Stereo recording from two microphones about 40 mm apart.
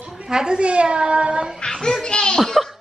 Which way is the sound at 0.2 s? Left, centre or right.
Centre.